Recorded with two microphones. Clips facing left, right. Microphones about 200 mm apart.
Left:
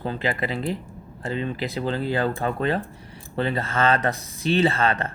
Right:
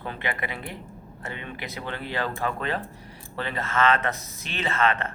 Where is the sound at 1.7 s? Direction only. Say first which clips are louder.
Left 6 dB; 30° left (ahead or behind).